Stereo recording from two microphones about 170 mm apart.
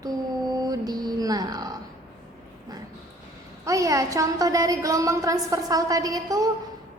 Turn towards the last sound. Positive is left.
turn(degrees=-20)  # may be behind; listen again after turning